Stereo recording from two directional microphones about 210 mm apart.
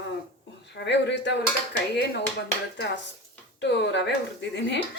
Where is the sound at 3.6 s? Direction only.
55° left (ahead or behind).